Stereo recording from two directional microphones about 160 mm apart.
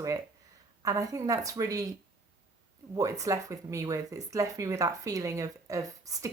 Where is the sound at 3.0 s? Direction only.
20° right (ahead or behind).